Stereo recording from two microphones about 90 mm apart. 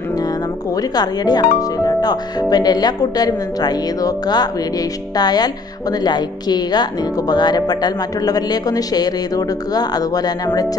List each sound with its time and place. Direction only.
0.7 s speech: 45° left (ahead or behind)